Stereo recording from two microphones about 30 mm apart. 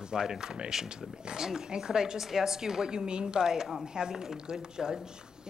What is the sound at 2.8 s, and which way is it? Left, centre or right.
A man's voice, right.